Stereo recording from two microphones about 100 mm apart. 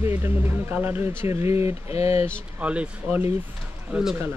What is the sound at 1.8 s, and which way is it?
Speech, 90° left.